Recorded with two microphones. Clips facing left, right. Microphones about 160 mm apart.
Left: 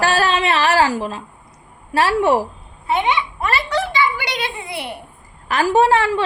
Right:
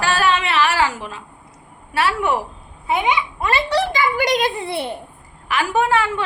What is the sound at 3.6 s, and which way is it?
A child's voice, 35° right (ahead or behind).